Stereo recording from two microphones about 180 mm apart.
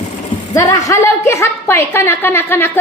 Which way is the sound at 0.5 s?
20° left (ahead or behind).